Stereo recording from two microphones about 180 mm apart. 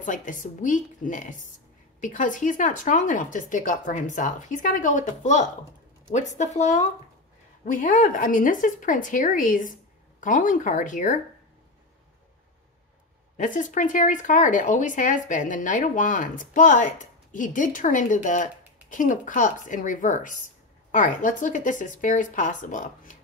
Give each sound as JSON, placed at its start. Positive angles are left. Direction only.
{"t": 0.0, "sound": "speech", "side_deg": 45}
{"t": 13.4, "sound": "speech", "side_deg": 45}